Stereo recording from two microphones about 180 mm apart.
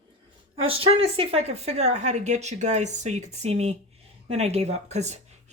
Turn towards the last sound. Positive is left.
turn(degrees=-40)  # may be behind; listen again after turning